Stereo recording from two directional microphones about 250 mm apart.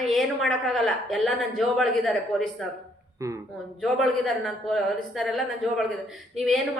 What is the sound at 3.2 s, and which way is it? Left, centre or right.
Speech, centre.